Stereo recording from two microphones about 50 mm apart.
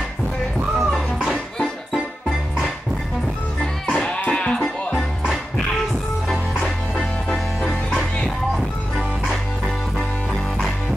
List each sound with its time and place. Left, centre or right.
0.7 s music: centre
3.9 s music: left
8.2 s music: centre